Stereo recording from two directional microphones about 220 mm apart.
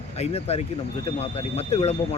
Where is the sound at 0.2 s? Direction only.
30° left (ahead or behind).